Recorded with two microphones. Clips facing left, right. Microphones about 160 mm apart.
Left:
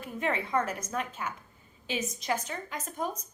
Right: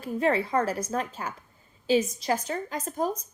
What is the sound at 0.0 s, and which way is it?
A woman's voice, 35° right (ahead or behind).